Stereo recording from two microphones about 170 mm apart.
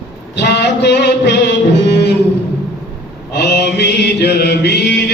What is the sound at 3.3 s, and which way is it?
Mantra, 80° left.